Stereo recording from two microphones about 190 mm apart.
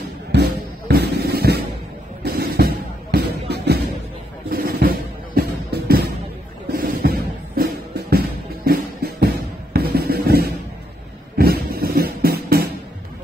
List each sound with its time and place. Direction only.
0.3 s music: 55° right (ahead or behind)